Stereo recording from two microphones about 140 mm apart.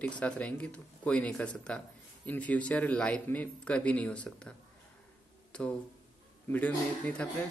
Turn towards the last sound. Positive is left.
turn(degrees=10)  # may be behind; listen again after turning